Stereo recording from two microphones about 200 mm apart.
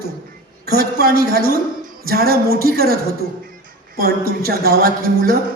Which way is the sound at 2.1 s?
50° right (ahead or behind).